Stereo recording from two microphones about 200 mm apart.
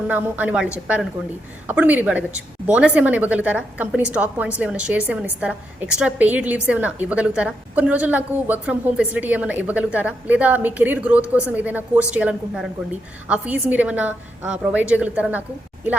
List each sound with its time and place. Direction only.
0.1 s a woman's voice: 10° right (ahead or behind)